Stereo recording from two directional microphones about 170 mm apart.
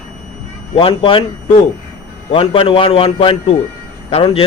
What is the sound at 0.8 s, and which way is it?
Speech, 30° left (ahead or behind).